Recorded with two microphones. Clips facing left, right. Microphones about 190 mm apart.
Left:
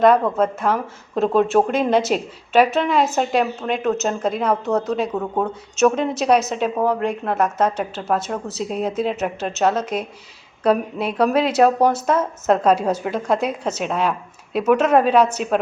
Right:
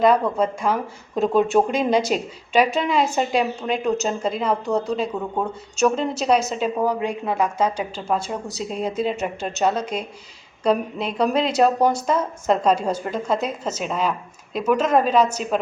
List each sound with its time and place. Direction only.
0.0 s speech: 5° left (ahead or behind)
6.5 s a woman's voice: 5° right (ahead or behind)
7.9 s a woman's voice: 5° left (ahead or behind)